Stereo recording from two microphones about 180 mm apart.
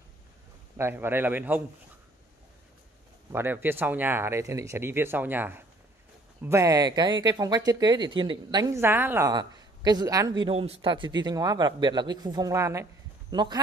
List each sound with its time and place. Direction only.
0.7 s speech: 15° right (ahead or behind)
3.3 s speech: 10° right (ahead or behind)
9.3 s speech: 25° right (ahead or behind)